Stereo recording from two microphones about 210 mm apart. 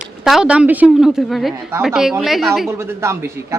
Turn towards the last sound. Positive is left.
turn(degrees=-15)  # may be behind; listen again after turning